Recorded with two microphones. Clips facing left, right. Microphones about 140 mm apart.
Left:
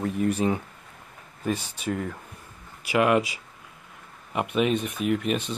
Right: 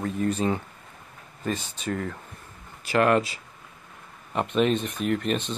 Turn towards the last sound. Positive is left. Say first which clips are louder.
# left 1 dB
turn(degrees=5)  # may be behind; listen again after turning